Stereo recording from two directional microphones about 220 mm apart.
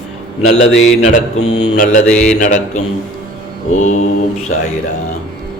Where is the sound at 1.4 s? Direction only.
75° left (ahead or behind).